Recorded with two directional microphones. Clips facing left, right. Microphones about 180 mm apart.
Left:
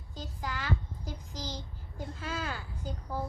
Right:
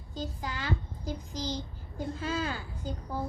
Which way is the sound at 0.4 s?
25° right (ahead or behind).